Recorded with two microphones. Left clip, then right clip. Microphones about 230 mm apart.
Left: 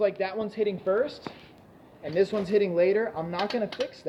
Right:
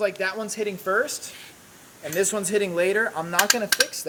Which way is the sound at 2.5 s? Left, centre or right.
Centre.